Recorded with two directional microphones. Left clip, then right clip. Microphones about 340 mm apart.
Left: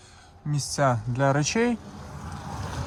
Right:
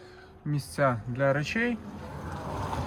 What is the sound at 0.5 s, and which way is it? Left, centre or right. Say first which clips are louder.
Speech: left 3 dB; centre.